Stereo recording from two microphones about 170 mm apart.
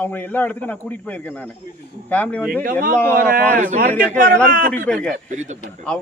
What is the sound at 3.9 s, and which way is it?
Speech, 10° left (ahead or behind).